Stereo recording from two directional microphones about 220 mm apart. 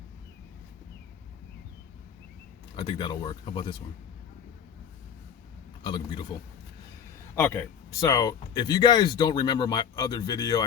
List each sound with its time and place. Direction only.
2.7 s speech: 20° left (ahead or behind)
5.8 s speech: 20° left (ahead or behind)
7.3 s speech: 10° left (ahead or behind)